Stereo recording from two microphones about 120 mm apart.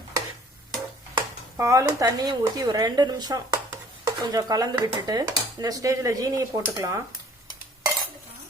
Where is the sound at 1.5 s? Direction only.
25° right (ahead or behind).